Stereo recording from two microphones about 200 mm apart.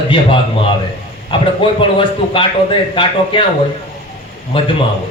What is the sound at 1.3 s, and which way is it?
A man's voice, 25° left (ahead or behind).